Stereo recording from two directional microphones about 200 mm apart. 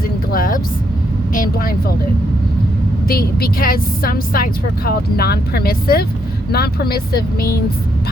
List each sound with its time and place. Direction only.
0.3 s a woman's voice: 45° left (ahead or behind)
3.1 s a woman's voice: 50° left (ahead or behind)